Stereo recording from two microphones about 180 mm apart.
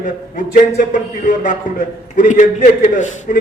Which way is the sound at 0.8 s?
45° left (ahead or behind).